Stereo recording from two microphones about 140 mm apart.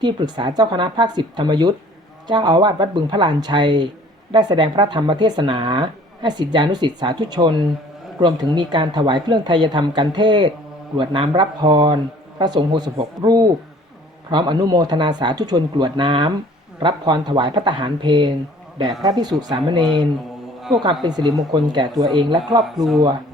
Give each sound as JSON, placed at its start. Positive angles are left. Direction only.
{"t": 0.0, "sound": "speech", "side_deg": -35}
{"t": 21.0, "sound": "speech", "side_deg": -30}
{"t": 22.6, "sound": "speech", "side_deg": 0}